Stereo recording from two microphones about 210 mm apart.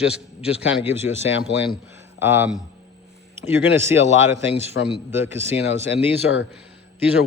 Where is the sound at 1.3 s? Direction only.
60° left (ahead or behind).